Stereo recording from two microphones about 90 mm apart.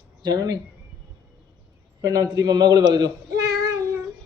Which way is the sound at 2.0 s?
40° right (ahead or behind).